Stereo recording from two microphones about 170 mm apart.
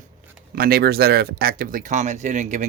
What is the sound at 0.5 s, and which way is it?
Speech, 65° right (ahead or behind).